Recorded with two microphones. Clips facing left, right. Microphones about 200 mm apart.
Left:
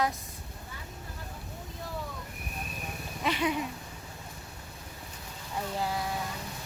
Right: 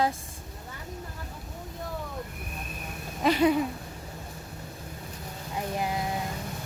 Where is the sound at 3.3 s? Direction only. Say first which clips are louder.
Right 7 dB; 40° right (ahead or behind).